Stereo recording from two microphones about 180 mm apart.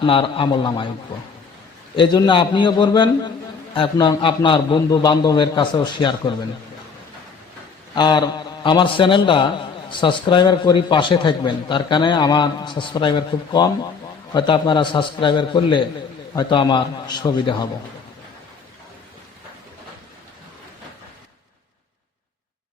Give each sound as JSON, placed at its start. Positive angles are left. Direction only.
{"t": 0.0, "sound": "a man's voice", "side_deg": 30}
{"t": 2.0, "sound": "a man's voice", "side_deg": 25}
{"t": 7.9, "sound": "a man's voice", "side_deg": 25}